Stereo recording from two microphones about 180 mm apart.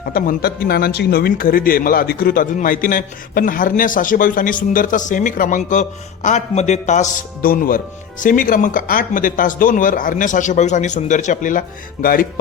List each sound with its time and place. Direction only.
0.1 s a man's voice: 55° left (ahead or behind)